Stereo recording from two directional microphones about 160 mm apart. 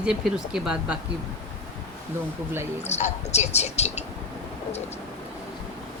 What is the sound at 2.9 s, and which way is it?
A woman's voice, 45° left (ahead or behind).